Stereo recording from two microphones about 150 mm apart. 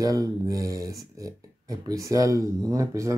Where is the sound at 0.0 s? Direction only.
25° right (ahead or behind).